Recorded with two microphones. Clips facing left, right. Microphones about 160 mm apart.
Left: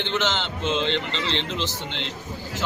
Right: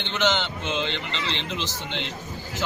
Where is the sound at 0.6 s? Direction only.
30° left (ahead or behind).